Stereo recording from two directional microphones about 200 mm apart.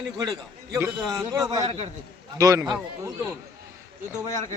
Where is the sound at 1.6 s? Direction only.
35° right (ahead or behind).